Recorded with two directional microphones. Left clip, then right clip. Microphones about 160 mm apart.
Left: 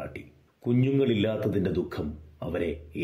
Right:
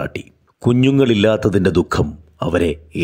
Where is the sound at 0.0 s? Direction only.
50° right (ahead or behind).